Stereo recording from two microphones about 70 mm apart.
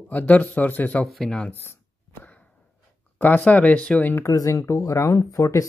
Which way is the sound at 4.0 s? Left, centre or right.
Left.